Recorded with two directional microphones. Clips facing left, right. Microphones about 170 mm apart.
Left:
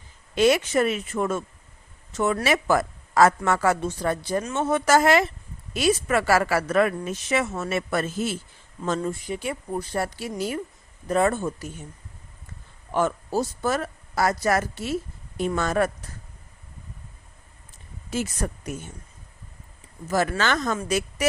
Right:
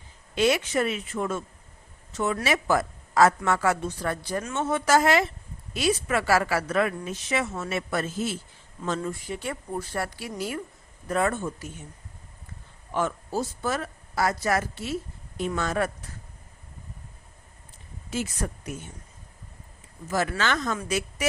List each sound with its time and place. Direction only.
0.3 s a woman's voice: 45° left (ahead or behind)
3.8 s speech: 20° left (ahead or behind)
4.5 s a woman's voice: 45° left (ahead or behind)
8.8 s speech: 30° left (ahead or behind)
9.2 s speech: 15° left (ahead or behind); by 11.7 s 30° left (ahead or behind)
12.9 s a woman's voice: 40° left (ahead or behind)
18.1 s speech: 40° left (ahead or behind)
20.1 s a woman's voice: 40° left (ahead or behind)